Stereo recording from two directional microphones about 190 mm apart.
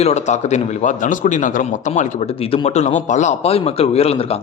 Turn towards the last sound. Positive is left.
turn(degrees=30)  # may be behind; listen again after turning